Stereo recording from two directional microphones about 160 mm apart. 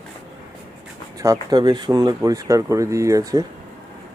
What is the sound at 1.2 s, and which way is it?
Speech, 25° right (ahead or behind).